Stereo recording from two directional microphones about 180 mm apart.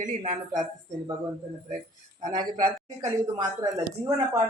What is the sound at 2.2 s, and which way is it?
Speech, 20° right (ahead or behind).